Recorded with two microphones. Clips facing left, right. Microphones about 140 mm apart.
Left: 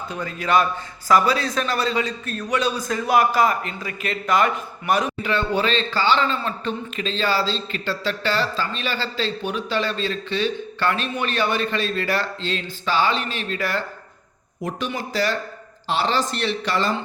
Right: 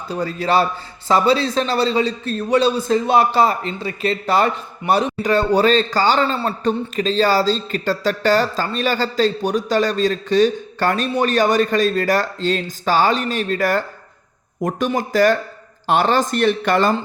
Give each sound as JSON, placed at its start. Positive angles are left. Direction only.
{"t": 0.1, "sound": "a man's voice", "side_deg": -35}